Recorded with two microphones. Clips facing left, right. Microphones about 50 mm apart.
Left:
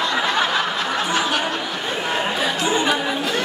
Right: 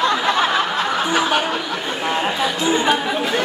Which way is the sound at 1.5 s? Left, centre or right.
Centre.